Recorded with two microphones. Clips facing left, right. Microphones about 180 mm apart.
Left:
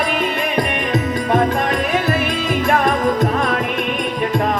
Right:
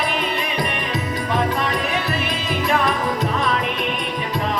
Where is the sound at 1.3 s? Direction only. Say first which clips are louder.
Left 5 dB; 50° left (ahead or behind).